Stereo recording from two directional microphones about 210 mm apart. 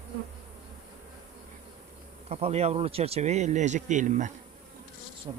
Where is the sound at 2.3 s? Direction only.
30° right (ahead or behind).